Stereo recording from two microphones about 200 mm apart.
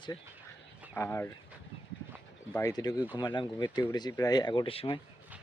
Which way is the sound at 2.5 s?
20° left (ahead or behind).